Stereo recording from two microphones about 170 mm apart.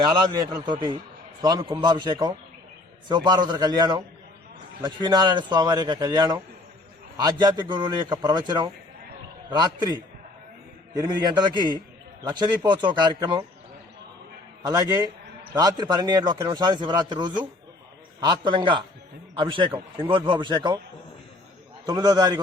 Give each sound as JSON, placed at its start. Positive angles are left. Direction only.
{"t": 0.6, "sound": "a man's voice", "side_deg": -25}
{"t": 14.6, "sound": "a man's voice", "side_deg": -25}
{"t": 21.8, "sound": "a man's voice", "side_deg": -20}